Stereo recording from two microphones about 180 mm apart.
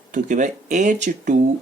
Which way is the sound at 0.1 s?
45° right (ahead or behind).